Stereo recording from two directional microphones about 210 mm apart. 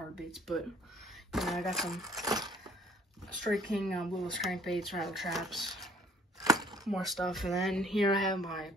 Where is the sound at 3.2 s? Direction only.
Centre (ahead or behind).